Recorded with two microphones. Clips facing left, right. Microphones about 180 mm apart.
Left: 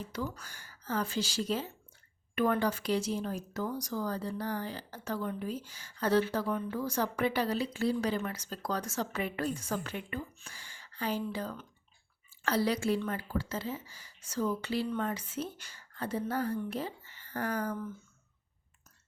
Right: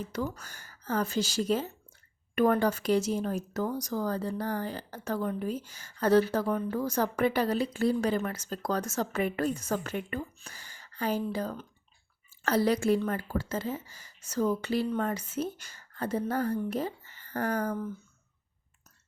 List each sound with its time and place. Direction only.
0.0 s speech: 45° right (ahead or behind)